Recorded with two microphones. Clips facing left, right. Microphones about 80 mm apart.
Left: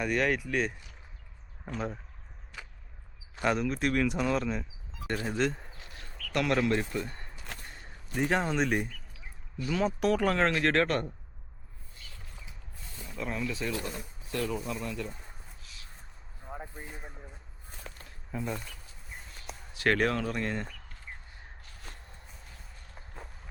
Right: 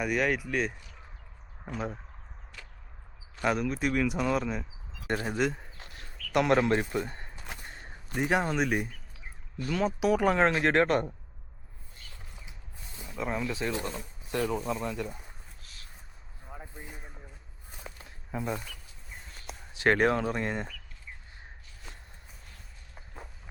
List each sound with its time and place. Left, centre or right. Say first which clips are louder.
0.0 s speech: even; centre
3.4 s speech: even; centre
5.0 s speech: right 1 dB; centre
6.3 s speech: right 3 dB; right
7.7 s a sound: right 3 dB; right
8.1 s speech: right 1 dB; centre
12.4 s a sound: even; centre
14.7 s speech: right 3 dB; right
16.5 s a sound: left 3 dB; centre
17.7 s a sound: right 1 dB; centre
19.7 s speech: right 3 dB; right
23.0 s walk: right 1 dB; centre